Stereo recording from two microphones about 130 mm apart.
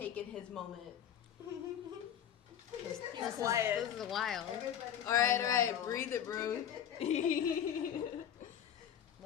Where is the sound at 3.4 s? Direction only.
25° right (ahead or behind).